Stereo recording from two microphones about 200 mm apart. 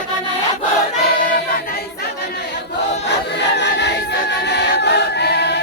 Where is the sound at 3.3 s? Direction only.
60° left (ahead or behind).